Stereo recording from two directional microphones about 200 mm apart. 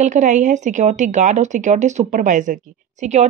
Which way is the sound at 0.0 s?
35° right (ahead or behind).